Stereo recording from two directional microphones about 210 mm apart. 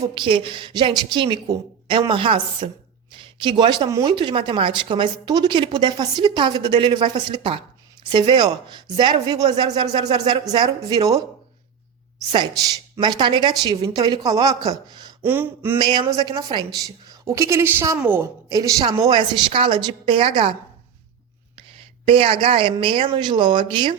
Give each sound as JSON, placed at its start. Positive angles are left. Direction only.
{"t": 0.0, "sound": "speech", "side_deg": -25}
{"t": 12.3, "sound": "a woman's voice", "side_deg": -20}
{"t": 15.8, "sound": "a woman's voice", "side_deg": -20}
{"t": 22.0, "sound": "speech", "side_deg": -25}